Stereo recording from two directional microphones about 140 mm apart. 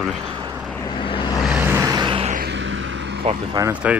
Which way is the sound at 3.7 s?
10° right (ahead or behind).